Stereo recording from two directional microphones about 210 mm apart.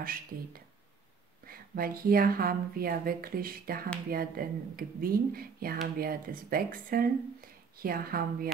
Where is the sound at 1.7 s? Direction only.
45° right (ahead or behind).